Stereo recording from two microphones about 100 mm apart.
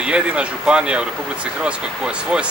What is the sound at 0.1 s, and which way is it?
Speech, 10° right (ahead or behind).